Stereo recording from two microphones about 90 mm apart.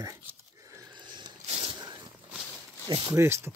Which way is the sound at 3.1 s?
30° right (ahead or behind).